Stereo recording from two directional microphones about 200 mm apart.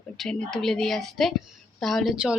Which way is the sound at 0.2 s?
Centre (ahead or behind).